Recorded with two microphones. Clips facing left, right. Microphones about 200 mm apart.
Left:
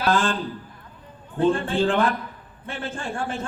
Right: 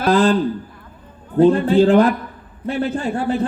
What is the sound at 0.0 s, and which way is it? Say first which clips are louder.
Speech: right 7 dB; 35° right (ahead or behind).